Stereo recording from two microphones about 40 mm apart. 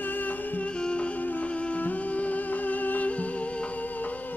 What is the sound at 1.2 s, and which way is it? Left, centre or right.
Music, left.